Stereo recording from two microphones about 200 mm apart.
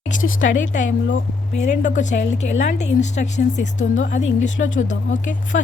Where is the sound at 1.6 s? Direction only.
40° left (ahead or behind).